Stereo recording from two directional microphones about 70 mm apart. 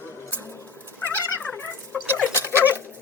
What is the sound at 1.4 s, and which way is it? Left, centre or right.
Dog, left.